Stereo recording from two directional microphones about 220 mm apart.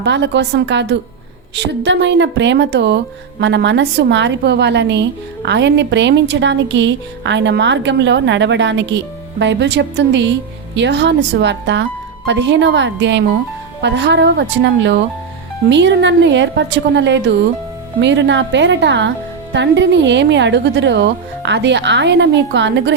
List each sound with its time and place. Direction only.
0.0 s a woman's voice: 50° right (ahead or behind)